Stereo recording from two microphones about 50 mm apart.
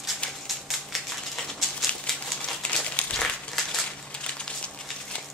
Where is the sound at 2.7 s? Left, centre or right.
Centre.